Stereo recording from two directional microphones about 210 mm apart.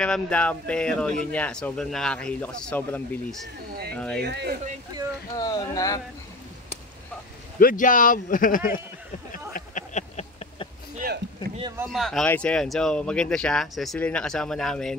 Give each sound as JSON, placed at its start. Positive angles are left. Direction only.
{"t": 0.0, "sound": "speech", "side_deg": 5}
{"t": 4.2, "sound": "speech", "side_deg": -50}
{"t": 5.3, "sound": "speech", "side_deg": 15}
{"t": 7.5, "sound": "speech", "side_deg": 40}
{"t": 9.5, "sound": "a sound", "side_deg": 35}
{"t": 11.9, "sound": "speech", "side_deg": 0}